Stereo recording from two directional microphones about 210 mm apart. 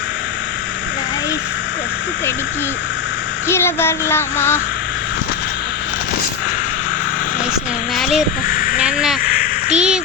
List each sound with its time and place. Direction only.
3.5 s child singing: 10° left (ahead or behind)
7.9 s crow: centre (ahead or behind)
8.4 s crow: 40° left (ahead or behind)
8.8 s a sound: 5° right (ahead or behind)